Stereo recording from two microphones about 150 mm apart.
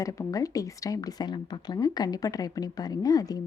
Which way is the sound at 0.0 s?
25° left (ahead or behind).